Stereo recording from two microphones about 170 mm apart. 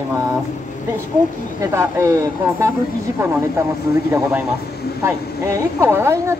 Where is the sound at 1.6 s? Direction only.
15° right (ahead or behind).